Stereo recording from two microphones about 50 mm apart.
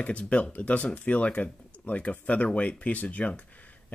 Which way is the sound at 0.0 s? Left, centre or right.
Left.